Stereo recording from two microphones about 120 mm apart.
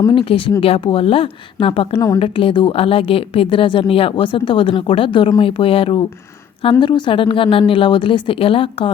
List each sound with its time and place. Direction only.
0.1 s a woman's voice: 45° left (ahead or behind)